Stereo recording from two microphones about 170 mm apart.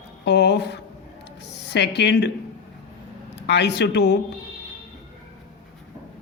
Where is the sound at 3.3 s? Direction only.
90° left.